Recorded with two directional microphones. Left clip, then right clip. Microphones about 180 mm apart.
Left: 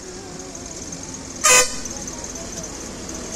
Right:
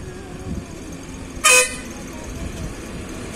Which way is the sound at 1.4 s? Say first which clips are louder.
Right 1 dB; 60° right (ahead or behind).